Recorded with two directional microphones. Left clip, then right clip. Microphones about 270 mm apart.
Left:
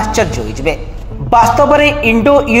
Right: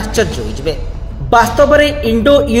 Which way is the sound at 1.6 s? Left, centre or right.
Left.